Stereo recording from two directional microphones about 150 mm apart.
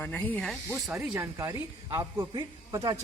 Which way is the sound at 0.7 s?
10° right (ahead or behind).